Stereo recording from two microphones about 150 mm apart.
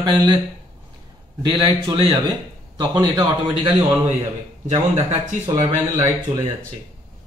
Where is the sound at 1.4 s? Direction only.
30° right (ahead or behind).